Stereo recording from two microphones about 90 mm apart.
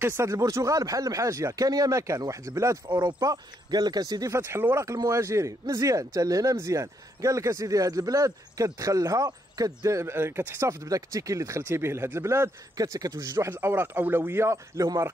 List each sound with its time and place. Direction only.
0.0 s speech: 30° right (ahead or behind)